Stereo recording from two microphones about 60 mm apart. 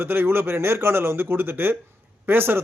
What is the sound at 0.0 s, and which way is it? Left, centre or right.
Speech, right.